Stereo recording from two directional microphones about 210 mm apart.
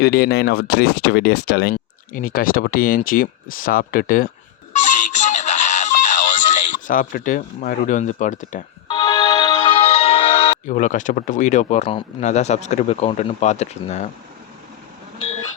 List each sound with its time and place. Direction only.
0.0 s speech: 50° left (ahead or behind)
4.7 s synthetic singing: 35° left (ahead or behind)
8.9 s speech: 15° left (ahead or behind); by 14.1 s 35° left (ahead or behind)